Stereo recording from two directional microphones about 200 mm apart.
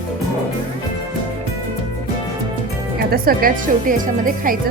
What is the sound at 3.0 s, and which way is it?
Speech, 50° right (ahead or behind).